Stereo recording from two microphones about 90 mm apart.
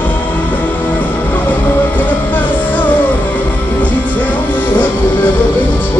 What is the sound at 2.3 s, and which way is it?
Music, 20° left (ahead or behind).